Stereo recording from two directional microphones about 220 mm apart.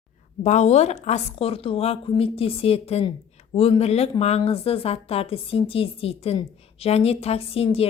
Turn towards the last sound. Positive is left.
turn(degrees=25)  # may be behind; listen again after turning